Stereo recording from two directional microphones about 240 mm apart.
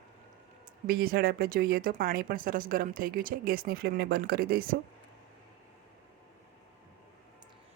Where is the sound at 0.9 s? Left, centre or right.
Right.